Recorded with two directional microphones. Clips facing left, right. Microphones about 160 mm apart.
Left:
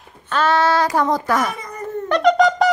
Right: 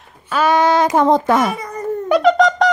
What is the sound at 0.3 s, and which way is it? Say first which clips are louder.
A child's voice: right 3 dB; 10° right (ahead or behind).